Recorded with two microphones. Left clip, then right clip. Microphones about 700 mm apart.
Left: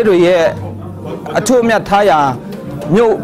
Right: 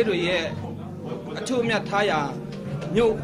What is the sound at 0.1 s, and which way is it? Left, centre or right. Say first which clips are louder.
A man's voice: left 15 dB; left.